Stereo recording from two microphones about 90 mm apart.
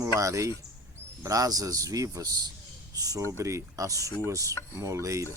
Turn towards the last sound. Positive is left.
turn(degrees=-35)  # may be behind; listen again after turning